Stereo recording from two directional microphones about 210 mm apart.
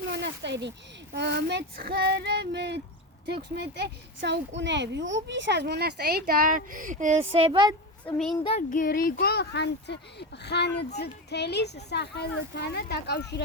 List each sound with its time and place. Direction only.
0.1 s a sound: 55° right (ahead or behind)
1.1 s speech: 55° right (ahead or behind); by 7.8 s 20° right (ahead or behind)
8.4 s child singing: 35° left (ahead or behind)
9.1 s speech: 50° left (ahead or behind)